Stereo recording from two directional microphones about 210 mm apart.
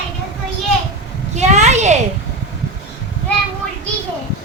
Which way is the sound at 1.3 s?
35° right (ahead or behind).